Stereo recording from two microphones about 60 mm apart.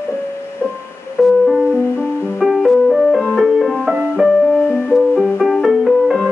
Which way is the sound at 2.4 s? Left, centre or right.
Centre.